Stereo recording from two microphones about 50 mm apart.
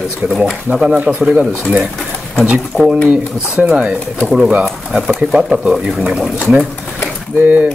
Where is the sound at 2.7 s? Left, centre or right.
Left.